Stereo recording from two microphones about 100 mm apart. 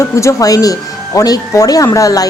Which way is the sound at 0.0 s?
30° left (ahead or behind).